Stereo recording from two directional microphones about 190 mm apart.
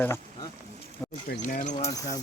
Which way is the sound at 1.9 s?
20° left (ahead or behind).